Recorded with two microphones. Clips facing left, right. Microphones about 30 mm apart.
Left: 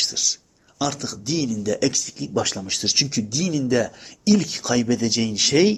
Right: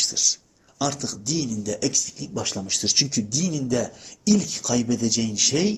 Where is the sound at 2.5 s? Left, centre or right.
Centre.